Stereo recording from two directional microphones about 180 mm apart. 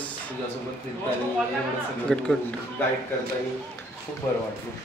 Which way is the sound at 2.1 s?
5° left (ahead or behind).